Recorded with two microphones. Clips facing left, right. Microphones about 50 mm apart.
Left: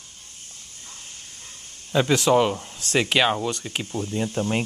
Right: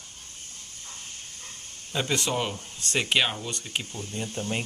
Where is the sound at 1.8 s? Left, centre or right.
Left.